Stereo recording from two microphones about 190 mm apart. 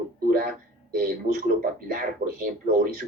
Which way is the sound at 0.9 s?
50° right (ahead or behind).